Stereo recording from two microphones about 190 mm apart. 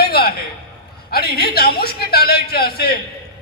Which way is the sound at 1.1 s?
55° left (ahead or behind).